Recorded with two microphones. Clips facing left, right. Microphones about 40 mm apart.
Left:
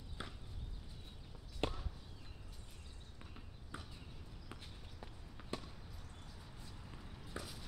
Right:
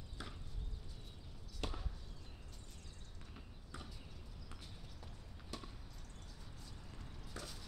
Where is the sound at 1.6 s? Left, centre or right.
Left.